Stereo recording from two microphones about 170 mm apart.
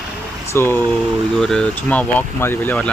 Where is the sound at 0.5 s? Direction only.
15° left (ahead or behind).